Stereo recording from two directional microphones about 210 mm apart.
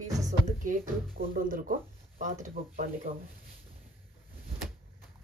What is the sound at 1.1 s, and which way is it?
Speech, 40° right (ahead or behind).